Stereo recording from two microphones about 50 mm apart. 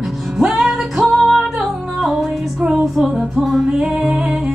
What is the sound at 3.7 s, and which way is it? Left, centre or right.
Music, centre.